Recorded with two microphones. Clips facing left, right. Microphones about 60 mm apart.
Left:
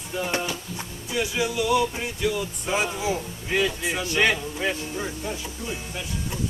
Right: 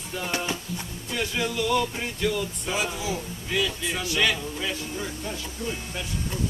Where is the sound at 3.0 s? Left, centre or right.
Left.